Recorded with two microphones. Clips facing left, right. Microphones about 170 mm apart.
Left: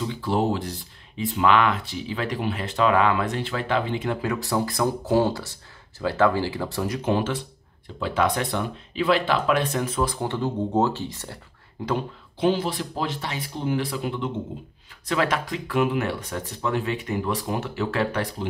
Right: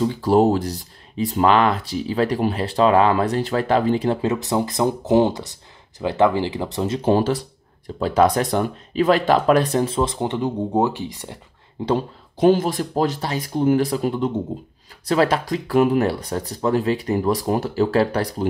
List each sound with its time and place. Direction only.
0.0 s speech: 40° right (ahead or behind); by 11.3 s 15° right (ahead or behind)
11.8 s speech: 25° right (ahead or behind)
12.4 s speech: 45° right (ahead or behind)